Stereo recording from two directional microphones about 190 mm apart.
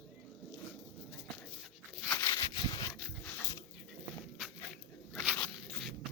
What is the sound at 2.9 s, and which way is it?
Dog, 5° left (ahead or behind).